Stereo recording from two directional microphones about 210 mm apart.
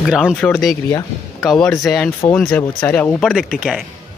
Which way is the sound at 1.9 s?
5° left (ahead or behind).